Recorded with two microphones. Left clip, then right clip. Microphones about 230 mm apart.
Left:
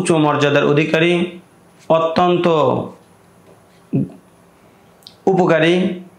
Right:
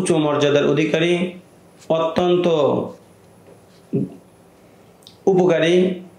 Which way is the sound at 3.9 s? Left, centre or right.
Left.